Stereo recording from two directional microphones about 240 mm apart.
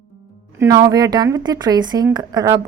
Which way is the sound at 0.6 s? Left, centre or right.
Centre.